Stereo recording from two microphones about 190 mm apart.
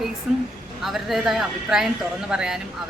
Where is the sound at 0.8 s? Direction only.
Centre (ahead or behind).